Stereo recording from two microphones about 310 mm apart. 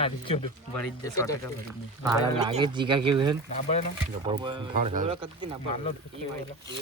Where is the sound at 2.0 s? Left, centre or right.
Centre.